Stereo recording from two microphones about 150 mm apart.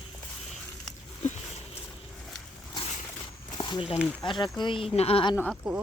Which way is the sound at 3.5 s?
30° left (ahead or behind).